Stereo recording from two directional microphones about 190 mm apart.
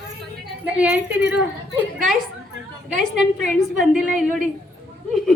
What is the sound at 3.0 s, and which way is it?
A woman's voice, centre (ahead or behind).